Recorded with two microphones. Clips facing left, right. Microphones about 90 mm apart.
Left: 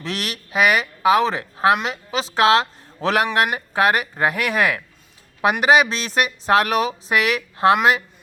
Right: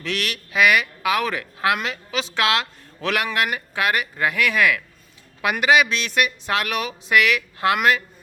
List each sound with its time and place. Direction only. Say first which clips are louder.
0.0 s speech: right 1 dB; 35° left (ahead or behind)